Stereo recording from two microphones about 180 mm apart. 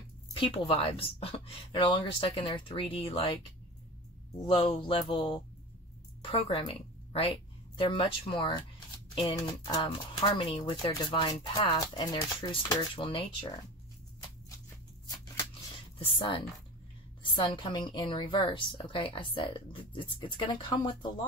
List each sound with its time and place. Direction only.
0.3 s speech: 30° left (ahead or behind)
4.5 s a woman's voice: 25° left (ahead or behind)
16.0 s a woman's voice: 30° left (ahead or behind)